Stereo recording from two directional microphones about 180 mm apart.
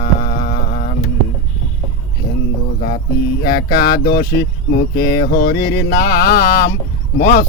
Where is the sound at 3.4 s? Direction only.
55° left (ahead or behind).